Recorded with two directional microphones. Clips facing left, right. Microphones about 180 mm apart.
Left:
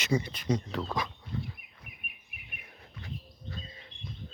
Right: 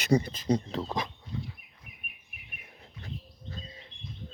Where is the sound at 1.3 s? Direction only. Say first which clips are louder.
Left 1 dB; 55° left (ahead or behind).